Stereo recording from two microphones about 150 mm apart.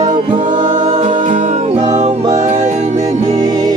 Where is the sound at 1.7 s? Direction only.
30° right (ahead or behind).